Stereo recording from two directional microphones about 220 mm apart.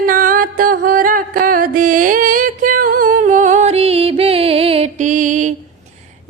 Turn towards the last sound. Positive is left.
turn(degrees=-35)  # may be behind; listen again after turning